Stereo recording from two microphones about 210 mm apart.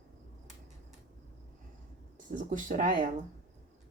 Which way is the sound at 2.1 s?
40° right (ahead or behind).